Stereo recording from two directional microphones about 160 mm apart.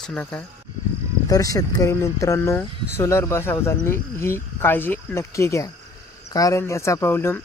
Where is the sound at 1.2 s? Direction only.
20° left (ahead or behind).